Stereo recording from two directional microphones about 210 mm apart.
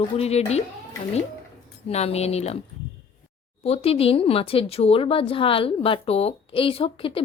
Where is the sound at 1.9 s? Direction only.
30° left (ahead or behind).